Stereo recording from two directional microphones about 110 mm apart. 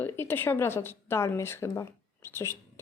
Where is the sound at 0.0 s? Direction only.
20° left (ahead or behind).